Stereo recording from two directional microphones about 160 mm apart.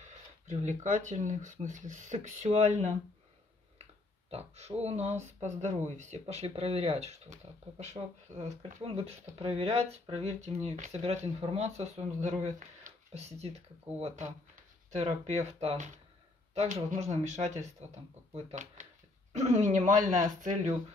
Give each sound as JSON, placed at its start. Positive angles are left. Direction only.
{"t": 0.0, "sound": "speech", "side_deg": -50}
{"t": 4.3, "sound": "speech", "side_deg": -40}
{"t": 14.5, "sound": "a sound", "side_deg": -45}
{"t": 15.2, "sound": "speech", "side_deg": -40}